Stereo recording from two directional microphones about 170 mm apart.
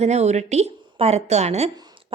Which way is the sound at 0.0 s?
40° right (ahead or behind).